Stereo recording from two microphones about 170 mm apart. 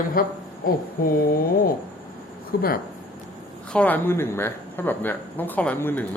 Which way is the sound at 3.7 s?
10° left (ahead or behind).